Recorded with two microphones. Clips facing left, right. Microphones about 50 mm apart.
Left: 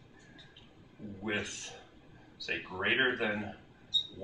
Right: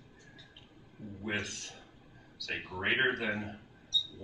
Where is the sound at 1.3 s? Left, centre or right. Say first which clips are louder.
Left 1 dB; centre.